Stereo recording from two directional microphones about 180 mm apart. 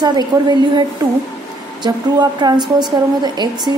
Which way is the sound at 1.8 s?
25° right (ahead or behind).